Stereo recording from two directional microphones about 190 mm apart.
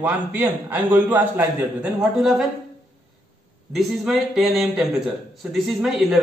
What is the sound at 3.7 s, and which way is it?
A man's voice, centre (ahead or behind).